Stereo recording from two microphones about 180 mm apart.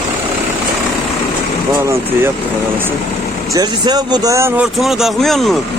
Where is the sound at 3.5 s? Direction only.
20° right (ahead or behind).